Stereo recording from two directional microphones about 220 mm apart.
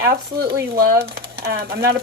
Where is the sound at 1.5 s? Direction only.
45° right (ahead or behind).